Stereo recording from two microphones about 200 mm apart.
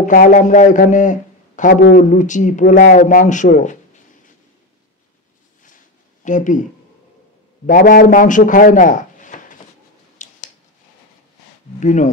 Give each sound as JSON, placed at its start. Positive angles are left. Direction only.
{"t": 0.0, "sound": "speech", "side_deg": 40}
{"t": 6.2, "sound": "speech", "side_deg": 40}
{"t": 7.6, "sound": "a man's voice", "side_deg": 45}
{"t": 10.2, "sound": "a sound", "side_deg": 40}
{"t": 11.8, "sound": "speech", "side_deg": 35}